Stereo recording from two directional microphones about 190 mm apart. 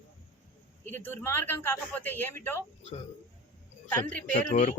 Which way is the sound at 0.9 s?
10° left (ahead or behind).